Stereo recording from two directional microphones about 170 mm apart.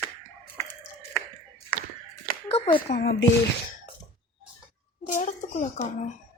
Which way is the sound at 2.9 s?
75° left (ahead or behind).